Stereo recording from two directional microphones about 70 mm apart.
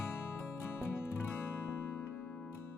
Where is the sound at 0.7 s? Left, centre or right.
Left.